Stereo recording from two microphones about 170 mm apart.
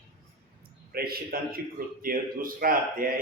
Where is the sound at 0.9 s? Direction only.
65° right (ahead or behind).